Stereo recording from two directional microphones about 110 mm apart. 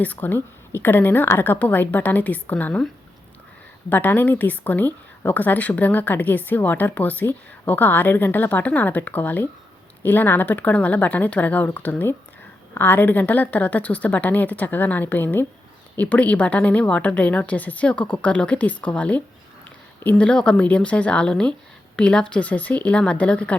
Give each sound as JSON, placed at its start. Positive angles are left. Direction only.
{"t": 0.0, "sound": "speech", "side_deg": 15}
{"t": 3.8, "sound": "speech", "side_deg": 15}